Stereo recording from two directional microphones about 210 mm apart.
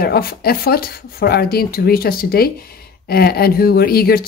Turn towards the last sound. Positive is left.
turn(degrees=45)  # may be behind; listen again after turning